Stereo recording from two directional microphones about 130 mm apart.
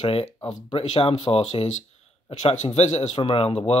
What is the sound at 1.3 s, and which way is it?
Speech, 30° left (ahead or behind).